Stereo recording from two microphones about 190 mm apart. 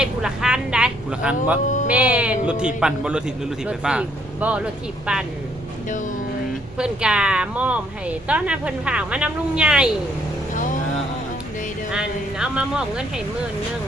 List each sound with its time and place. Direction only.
0.0 s vehicle: 5° right (ahead or behind)
1.6 s a sound: 40° left (ahead or behind)
1.9 s speech: 5° right (ahead or behind)
6.7 s speech: 5° right (ahead or behind)
10.5 s vehicle: 45° left (ahead or behind)
11.9 s speech: 5° right (ahead or behind)